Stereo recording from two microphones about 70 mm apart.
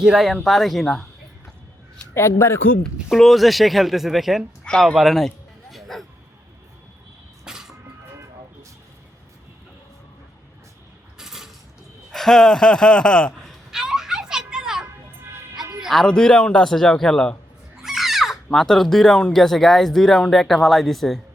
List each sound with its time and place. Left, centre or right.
0.0 s speech: centre
0.3 s speech: centre
2.6 s speech: left
3.1 s speech: centre
4.6 s speech: centre
7.4 s a sound: centre
11.2 s creak: centre
12.1 s a man's voice: centre
13.7 s children playing: centre
15.8 s music: centre
16.0 s a man's voice: centre
17.8 s a sound: centre
18.5 s speech: centre